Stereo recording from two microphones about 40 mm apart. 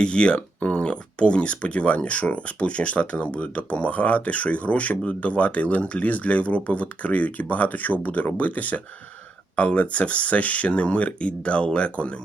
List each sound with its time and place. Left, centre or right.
0.0 s speech: left